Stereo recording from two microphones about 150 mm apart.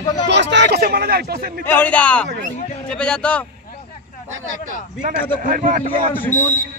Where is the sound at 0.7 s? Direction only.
90° right.